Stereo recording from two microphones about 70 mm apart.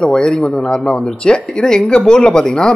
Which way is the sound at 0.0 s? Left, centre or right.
Centre.